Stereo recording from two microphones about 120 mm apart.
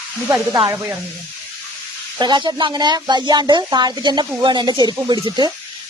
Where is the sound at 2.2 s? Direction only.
40° right (ahead or behind).